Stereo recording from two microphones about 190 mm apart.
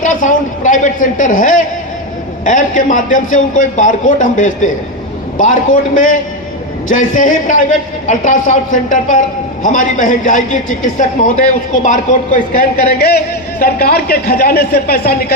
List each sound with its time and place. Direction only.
0.0 s a man's voice: 40° left (ahead or behind)